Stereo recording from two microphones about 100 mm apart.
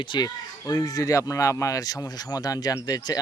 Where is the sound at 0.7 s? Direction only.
35° left (ahead or behind).